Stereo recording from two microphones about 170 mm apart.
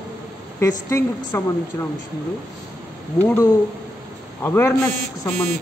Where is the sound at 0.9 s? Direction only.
20° left (ahead or behind).